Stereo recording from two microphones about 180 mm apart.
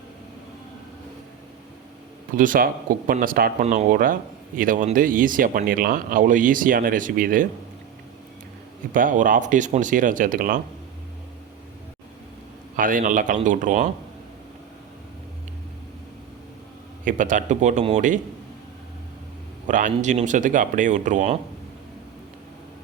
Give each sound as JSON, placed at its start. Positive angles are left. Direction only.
{"t": 2.3, "sound": "speech", "side_deg": -50}
{"t": 8.9, "sound": "speech", "side_deg": -50}
{"t": 12.7, "sound": "speech", "side_deg": -50}
{"t": 17.1, "sound": "speech", "side_deg": -45}
{"t": 19.6, "sound": "speech", "side_deg": -45}